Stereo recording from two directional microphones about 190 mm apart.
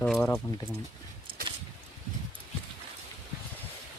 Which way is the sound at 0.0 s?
10° left (ahead or behind).